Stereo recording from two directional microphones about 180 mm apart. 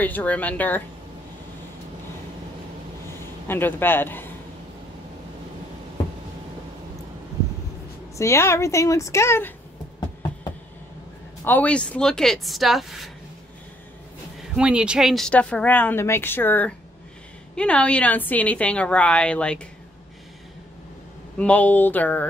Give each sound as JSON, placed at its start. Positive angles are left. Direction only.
{"t": 0.0, "sound": "speech", "side_deg": 10}
{"t": 3.4, "sound": "speech", "side_deg": 10}
{"t": 8.2, "sound": "speech", "side_deg": 15}
{"t": 11.4, "sound": "speech", "side_deg": 10}
{"t": 14.5, "sound": "speech", "side_deg": -5}
{"t": 21.4, "sound": "speech", "side_deg": 10}